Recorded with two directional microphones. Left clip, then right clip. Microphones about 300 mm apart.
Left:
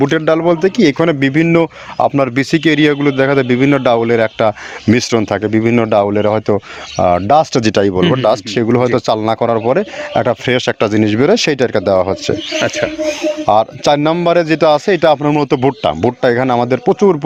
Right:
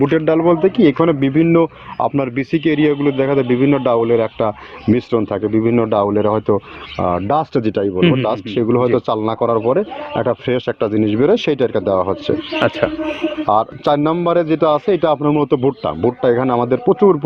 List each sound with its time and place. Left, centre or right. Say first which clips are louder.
0.0 s a man's voice: left 2 dB; left
12.5 s music: even; centre
13.4 s a man's voice: left 4 dB; left